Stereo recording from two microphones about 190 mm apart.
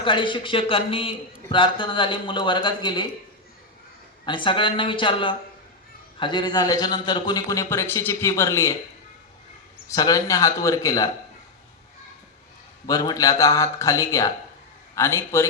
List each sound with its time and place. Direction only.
0.0 s a man's voice: 25° left (ahead or behind)
4.3 s a man's voice: 25° left (ahead or behind)
9.9 s speech: 20° left (ahead or behind)
12.8 s speech: 20° left (ahead or behind)